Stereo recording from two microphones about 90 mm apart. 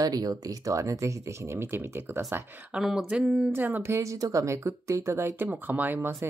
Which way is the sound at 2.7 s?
5° right (ahead or behind).